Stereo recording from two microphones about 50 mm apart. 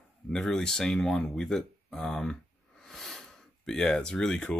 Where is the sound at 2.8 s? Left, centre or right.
Centre.